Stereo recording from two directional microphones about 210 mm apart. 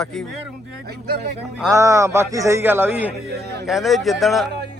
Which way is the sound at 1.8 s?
15° right (ahead or behind).